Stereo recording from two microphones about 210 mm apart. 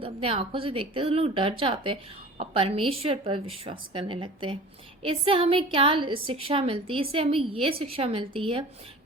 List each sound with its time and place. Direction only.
0.0 s a woman's voice: 25° right (ahead or behind)